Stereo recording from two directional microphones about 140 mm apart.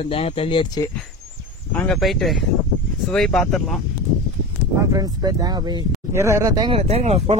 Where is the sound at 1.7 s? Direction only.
5° left (ahead or behind).